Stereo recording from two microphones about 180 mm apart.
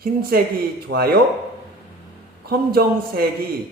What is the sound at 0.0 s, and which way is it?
Speech, 55° right (ahead or behind).